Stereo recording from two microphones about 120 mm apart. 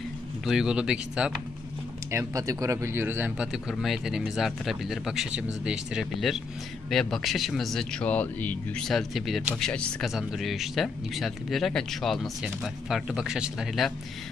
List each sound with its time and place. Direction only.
0.5 s speech: 5° right (ahead or behind)
2.0 s speech: 25° right (ahead or behind)
3.7 s a man's voice: centre (ahead or behind)